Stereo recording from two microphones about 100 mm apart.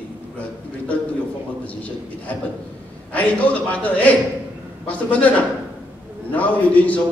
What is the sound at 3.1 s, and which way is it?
A man's voice, 15° left (ahead or behind).